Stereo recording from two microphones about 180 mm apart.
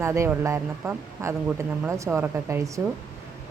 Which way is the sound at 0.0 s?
15° right (ahead or behind).